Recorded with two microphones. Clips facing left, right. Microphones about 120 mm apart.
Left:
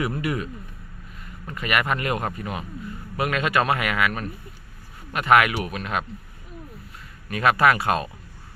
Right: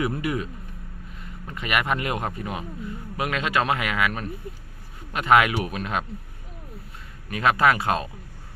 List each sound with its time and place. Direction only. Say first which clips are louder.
0.0 s speech: even; 20° right (ahead or behind)
1.5 s speech: left 1 dB; 20° right (ahead or behind)
7.3 s speech: left 1 dB; 20° right (ahead or behind)